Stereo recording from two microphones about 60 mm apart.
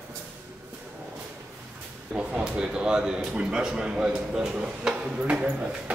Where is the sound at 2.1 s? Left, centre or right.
Centre.